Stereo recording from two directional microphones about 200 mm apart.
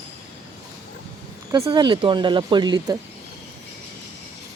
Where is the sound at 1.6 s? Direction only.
20° right (ahead or behind).